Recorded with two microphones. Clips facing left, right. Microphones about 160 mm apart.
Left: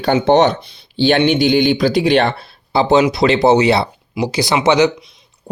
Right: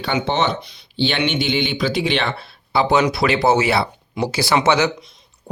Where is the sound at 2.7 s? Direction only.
25° left (ahead or behind).